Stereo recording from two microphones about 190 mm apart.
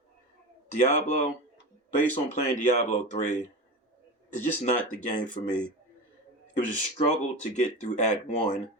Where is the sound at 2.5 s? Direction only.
40° left (ahead or behind).